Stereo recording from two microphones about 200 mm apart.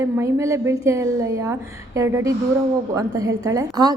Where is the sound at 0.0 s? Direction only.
15° right (ahead or behind).